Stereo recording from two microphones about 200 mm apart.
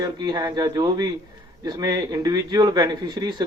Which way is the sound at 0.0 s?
20° right (ahead or behind).